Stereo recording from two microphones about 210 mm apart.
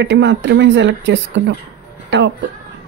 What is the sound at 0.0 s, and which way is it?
Speech, 60° right (ahead or behind).